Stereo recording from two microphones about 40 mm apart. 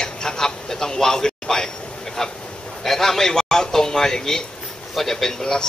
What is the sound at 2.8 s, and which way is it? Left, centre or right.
A man's voice, centre.